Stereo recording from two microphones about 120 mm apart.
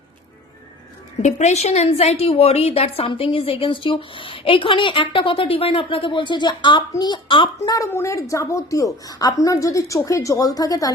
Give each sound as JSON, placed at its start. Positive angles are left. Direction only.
{"t": 1.2, "sound": "a woman's voice", "side_deg": 75}
{"t": 7.7, "sound": "a woman's voice", "side_deg": 20}